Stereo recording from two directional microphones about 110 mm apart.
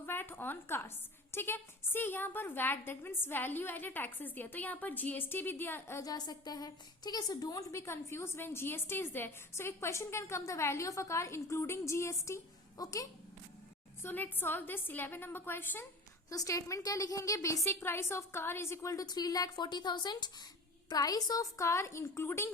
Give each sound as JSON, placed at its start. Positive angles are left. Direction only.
{"t": 0.0, "sound": "a woman's voice", "side_deg": 20}
{"t": 6.0, "sound": "a woman's voice", "side_deg": 35}
{"t": 14.0, "sound": "a woman's voice", "side_deg": 20}
{"t": 16.3, "sound": "a woman's voice", "side_deg": 30}